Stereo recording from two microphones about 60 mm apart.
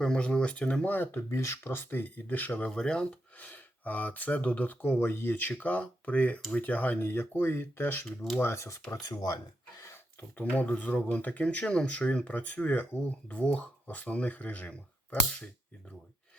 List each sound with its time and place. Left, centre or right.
0.0 s speech: centre
0.9 s speech: left
1.3 s speech: left
1.7 s speech: left
2.7 s speech: centre
3.3 s speech: left
8.9 s speech: left
9.8 s a sound: left
10.3 s speech: left